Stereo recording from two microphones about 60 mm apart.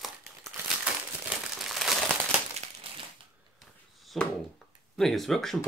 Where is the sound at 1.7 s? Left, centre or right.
Centre.